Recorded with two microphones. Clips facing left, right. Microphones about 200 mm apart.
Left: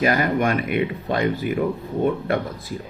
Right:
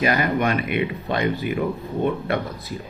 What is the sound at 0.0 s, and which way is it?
A man's voice, 45° left (ahead or behind).